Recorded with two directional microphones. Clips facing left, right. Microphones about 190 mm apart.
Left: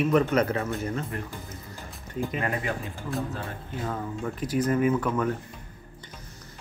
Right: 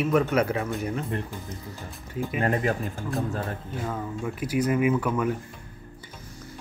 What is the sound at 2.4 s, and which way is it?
Speech, 40° right (ahead or behind).